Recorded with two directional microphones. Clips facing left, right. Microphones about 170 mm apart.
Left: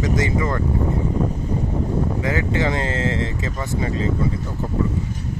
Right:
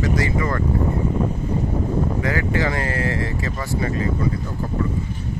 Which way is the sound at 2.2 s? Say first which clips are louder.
Even; 20° left (ahead or behind).